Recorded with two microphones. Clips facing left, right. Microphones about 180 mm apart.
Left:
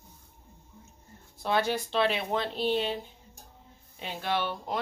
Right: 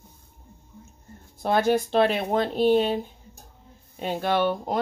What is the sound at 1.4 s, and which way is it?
A woman's voice, 50° right (ahead or behind).